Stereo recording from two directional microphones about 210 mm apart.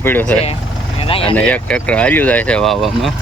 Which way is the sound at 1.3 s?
5° left (ahead or behind).